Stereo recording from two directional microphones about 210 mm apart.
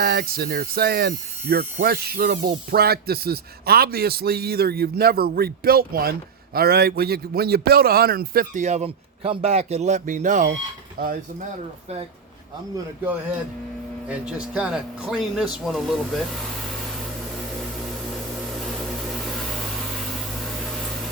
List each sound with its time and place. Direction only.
0.0 s speech: 50° right (ahead or behind)
14.5 s speech: 5° right (ahead or behind)